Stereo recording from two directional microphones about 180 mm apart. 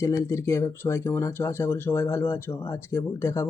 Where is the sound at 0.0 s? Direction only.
15° left (ahead or behind).